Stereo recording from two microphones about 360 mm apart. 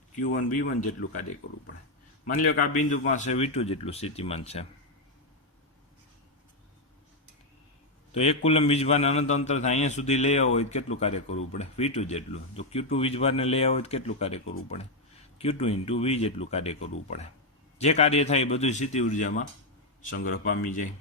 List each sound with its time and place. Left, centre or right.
0.3 s a man's voice: left
2.2 s speech: left
8.1 s a man's voice: centre